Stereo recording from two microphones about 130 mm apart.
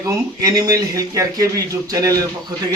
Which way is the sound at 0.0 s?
25° right (ahead or behind).